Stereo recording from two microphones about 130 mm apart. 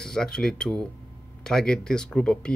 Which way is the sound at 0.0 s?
5° left (ahead or behind).